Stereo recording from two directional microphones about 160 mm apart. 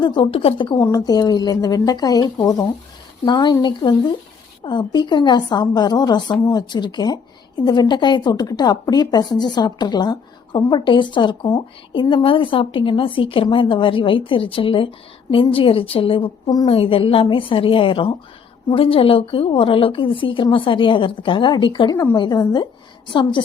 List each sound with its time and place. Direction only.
0.0 s a woman's voice: 30° left (ahead or behind)